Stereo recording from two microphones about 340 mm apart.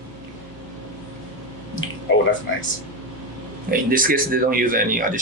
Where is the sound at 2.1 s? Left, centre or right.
Left.